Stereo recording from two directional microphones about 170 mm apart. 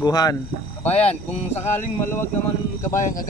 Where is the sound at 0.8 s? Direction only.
10° left (ahead or behind).